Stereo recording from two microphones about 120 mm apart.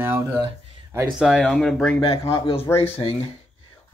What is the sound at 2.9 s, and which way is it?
Speech, 50° left (ahead or behind).